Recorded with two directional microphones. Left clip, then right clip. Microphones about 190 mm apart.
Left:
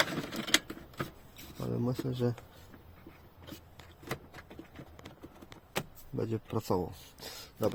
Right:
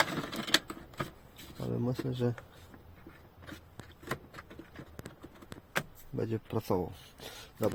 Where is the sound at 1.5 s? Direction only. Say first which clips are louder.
Even; centre (ahead or behind).